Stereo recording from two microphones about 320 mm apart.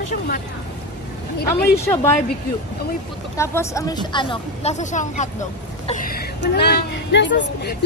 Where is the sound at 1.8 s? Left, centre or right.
Centre.